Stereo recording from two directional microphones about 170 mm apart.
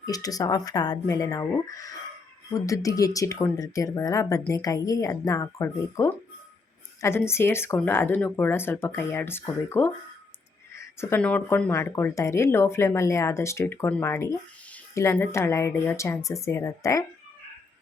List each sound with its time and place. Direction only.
0.0 s speech: 20° left (ahead or behind)